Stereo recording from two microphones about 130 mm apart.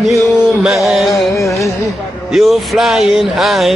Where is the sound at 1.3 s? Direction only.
25° left (ahead or behind).